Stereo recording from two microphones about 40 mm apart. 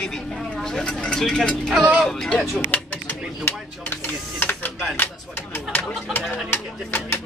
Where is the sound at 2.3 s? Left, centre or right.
Left.